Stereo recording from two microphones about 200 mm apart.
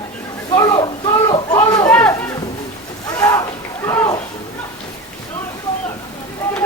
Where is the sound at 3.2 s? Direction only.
15° left (ahead or behind).